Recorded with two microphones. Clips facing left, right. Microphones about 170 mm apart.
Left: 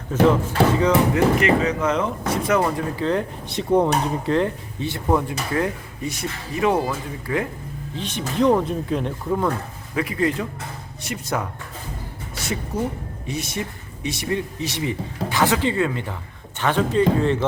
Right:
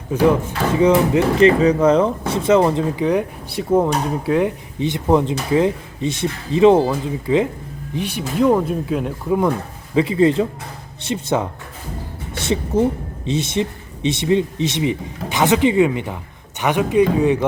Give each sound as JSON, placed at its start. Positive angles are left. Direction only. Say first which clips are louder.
{"t": 0.1, "sound": "speech", "louder": "right 1 dB", "side_deg": -10}
{"t": 3.0, "sound": "speech", "louder": "right 4 dB", "side_deg": -10}
{"t": 7.9, "sound": "speech", "louder": "right 3 dB", "side_deg": -10}
{"t": 9.9, "sound": "speech", "louder": "right 7 dB", "side_deg": -25}